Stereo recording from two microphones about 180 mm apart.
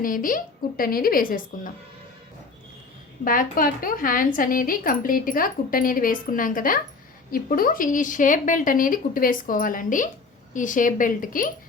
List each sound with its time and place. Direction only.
0.0 s speech: 50° left (ahead or behind)
3.2 s speech: 50° left (ahead or behind)